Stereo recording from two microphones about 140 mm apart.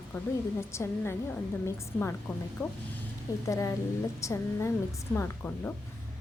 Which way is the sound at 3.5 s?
20° left (ahead or behind).